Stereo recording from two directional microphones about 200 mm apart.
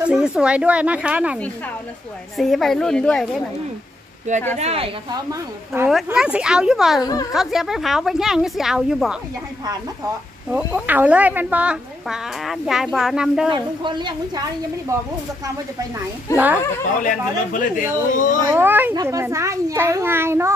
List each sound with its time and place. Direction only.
0.0 s a woman's voice: 5° right (ahead or behind)
4.6 s a woman's voice: 30° right (ahead or behind)
5.3 s a child's voice: 10° right (ahead or behind)
7.0 s speech: 20° left (ahead or behind)
7.3 s a woman's voice: centre (ahead or behind)
10.5 s a woman's voice: 10° right (ahead or behind)
13.5 s a woman's voice: 25° right (ahead or behind)
16.3 s a child's voice: 10° right (ahead or behind)
17.0 s a man's voice: 40° left (ahead or behind)
18.5 s a child's voice: 10° right (ahead or behind)